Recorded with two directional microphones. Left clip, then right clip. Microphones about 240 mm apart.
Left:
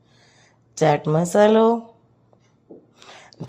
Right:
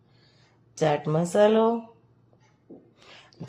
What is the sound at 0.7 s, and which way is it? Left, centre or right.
Speech, left.